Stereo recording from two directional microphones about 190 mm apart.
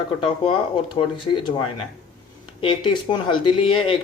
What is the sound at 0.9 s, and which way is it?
Speech, 25° left (ahead or behind).